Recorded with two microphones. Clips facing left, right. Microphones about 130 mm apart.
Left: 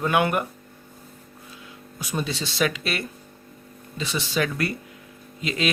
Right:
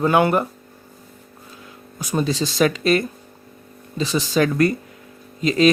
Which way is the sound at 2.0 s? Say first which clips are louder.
Right 7 dB; 40° right (ahead or behind).